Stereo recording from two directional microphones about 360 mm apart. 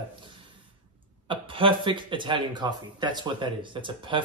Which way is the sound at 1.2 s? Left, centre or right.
Centre.